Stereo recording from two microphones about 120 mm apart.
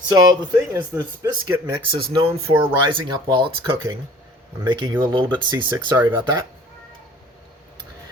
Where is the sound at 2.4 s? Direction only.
50° right (ahead or behind).